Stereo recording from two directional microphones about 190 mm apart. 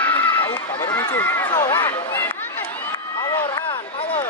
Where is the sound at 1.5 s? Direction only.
10° left (ahead or behind).